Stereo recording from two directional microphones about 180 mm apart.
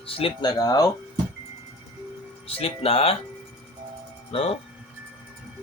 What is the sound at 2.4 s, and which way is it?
Speech, 30° left (ahead or behind).